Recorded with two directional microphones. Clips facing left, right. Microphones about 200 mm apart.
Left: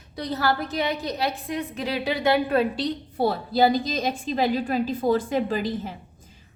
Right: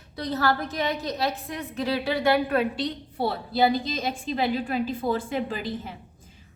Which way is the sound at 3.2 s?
40° left (ahead or behind).